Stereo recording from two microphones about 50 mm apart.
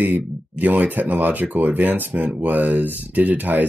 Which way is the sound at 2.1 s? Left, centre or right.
Right.